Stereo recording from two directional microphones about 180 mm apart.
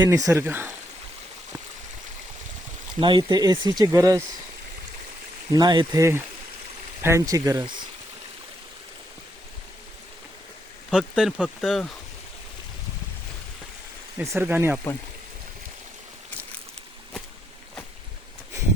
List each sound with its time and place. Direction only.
0.0 s speech: 20° right (ahead or behind)
3.0 s speech: 25° right (ahead or behind)
5.5 s speech: 25° right (ahead or behind)
10.9 s speech: 5° right (ahead or behind)
14.2 s speech: 10° right (ahead or behind)